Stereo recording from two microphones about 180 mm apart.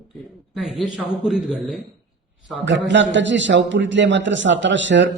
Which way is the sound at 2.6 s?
85° right.